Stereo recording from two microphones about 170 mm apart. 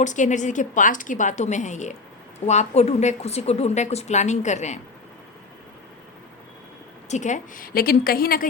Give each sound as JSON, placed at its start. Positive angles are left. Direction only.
{"t": 0.0, "sound": "a woman's voice", "side_deg": 45}
{"t": 7.1, "sound": "a woman's voice", "side_deg": 45}